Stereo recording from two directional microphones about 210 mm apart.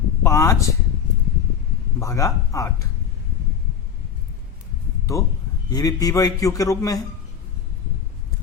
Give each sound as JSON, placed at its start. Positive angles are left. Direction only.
{"t": 0.2, "sound": "a man's voice", "side_deg": 15}
{"t": 2.0, "sound": "a man's voice", "side_deg": 15}
{"t": 5.2, "sound": "a man's voice", "side_deg": 15}